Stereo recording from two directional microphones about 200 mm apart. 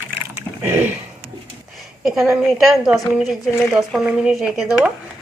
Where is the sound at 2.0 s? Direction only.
5° right (ahead or behind).